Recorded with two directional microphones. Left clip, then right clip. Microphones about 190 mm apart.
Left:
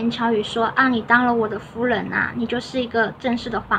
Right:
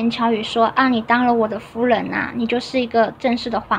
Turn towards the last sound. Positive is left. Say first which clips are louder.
# right 4 dB
turn(degrees=-25)  # may be behind; listen again after turning